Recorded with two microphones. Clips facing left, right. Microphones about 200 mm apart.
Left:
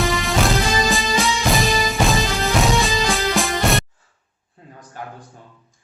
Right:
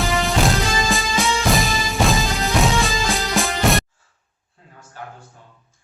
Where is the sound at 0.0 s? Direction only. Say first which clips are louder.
Even; centre (ahead or behind).